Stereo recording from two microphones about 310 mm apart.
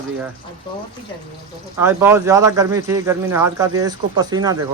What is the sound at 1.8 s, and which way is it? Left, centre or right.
Speech, centre.